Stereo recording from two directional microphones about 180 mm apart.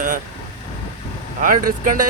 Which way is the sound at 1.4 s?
50° right (ahead or behind).